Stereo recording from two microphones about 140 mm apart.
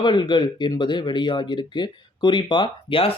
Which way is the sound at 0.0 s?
35° left (ahead or behind).